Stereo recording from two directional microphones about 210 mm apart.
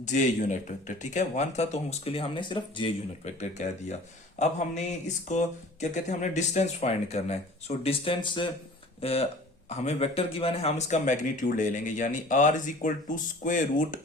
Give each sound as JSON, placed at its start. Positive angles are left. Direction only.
{"t": 0.0, "sound": "speech", "side_deg": 35}
{"t": 3.2, "sound": "speech", "side_deg": 35}